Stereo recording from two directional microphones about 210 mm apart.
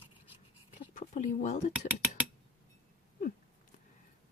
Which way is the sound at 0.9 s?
35° left (ahead or behind).